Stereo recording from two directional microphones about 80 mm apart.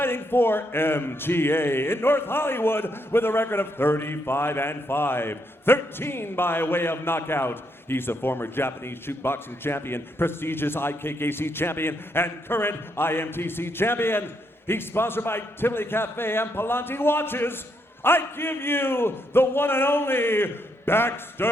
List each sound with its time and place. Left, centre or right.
0.0 s a man's voice: left